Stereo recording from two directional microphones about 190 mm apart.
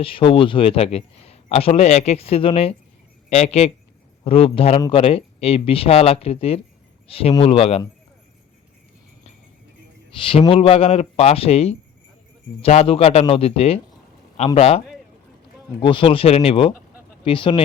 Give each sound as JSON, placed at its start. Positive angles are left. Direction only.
{"t": 0.0, "sound": "a man's voice", "side_deg": 30}
{"t": 10.2, "sound": "a man's voice", "side_deg": 30}
{"t": 15.8, "sound": "speech", "side_deg": 25}